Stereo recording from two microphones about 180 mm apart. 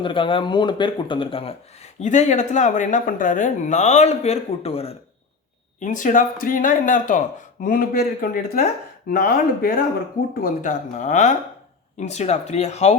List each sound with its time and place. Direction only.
0.0 s speech: 30° left (ahead or behind)
5.8 s speech: 45° left (ahead or behind)